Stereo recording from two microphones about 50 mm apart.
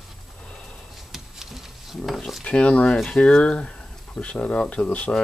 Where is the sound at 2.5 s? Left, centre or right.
Left.